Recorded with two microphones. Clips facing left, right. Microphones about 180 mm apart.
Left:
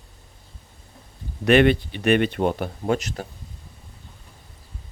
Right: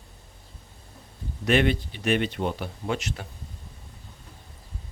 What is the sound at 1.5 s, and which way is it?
Speech, 65° left (ahead or behind).